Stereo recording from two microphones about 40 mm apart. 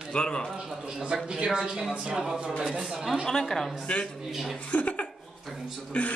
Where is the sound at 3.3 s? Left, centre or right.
Centre.